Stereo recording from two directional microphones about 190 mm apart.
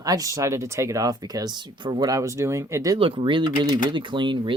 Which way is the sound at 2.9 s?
25° right (ahead or behind).